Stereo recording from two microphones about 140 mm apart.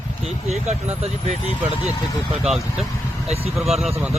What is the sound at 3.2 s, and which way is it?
Speech, 45° right (ahead or behind).